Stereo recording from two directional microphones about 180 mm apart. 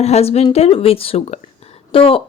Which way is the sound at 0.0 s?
35° left (ahead or behind).